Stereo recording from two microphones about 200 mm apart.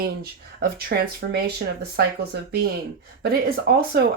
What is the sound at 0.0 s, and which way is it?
Speech, 50° right (ahead or behind).